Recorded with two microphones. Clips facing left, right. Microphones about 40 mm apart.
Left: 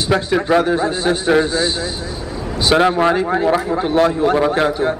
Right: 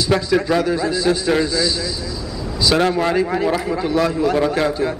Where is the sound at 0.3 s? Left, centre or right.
Left.